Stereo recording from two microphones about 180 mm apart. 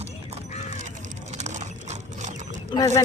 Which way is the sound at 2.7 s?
15° left (ahead or behind).